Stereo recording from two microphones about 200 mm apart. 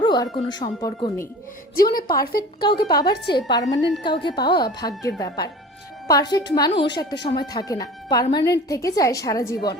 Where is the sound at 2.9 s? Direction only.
20° left (ahead or behind).